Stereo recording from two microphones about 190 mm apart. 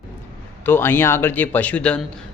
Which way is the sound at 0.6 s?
10° left (ahead or behind).